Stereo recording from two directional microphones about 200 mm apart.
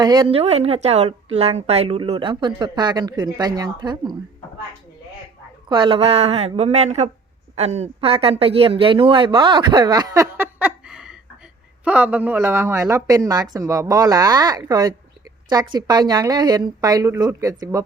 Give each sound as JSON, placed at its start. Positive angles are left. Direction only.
{"t": 0.0, "sound": "a woman's voice", "side_deg": -20}
{"t": 5.6, "sound": "a woman's voice", "side_deg": -20}